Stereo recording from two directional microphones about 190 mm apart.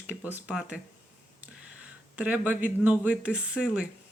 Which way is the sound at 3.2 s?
5° right (ahead or behind).